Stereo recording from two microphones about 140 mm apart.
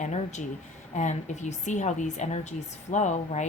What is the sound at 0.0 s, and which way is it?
A woman's voice, 55° left (ahead or behind).